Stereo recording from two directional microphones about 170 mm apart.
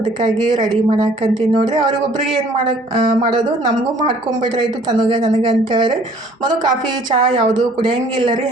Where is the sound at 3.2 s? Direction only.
30° right (ahead or behind).